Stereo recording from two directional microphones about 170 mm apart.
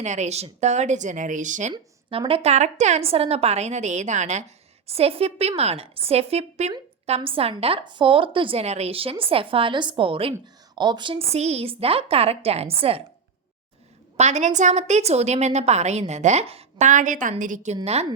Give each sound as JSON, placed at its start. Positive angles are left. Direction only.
{"t": 0.0, "sound": "speech", "side_deg": -45}
{"t": 1.7, "sound": "a woman's voice", "side_deg": -30}
{"t": 14.2, "sound": "a woman's voice", "side_deg": -45}